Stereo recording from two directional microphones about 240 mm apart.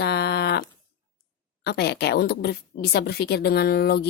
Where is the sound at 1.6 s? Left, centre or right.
Left.